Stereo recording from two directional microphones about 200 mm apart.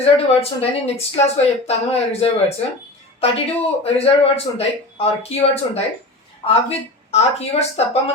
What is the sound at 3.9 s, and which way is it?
A woman's voice, 30° left (ahead or behind).